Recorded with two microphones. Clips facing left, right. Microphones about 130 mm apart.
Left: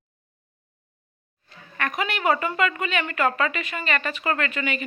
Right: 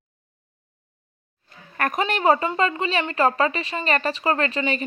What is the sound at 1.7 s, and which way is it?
Speech, 45° right (ahead or behind).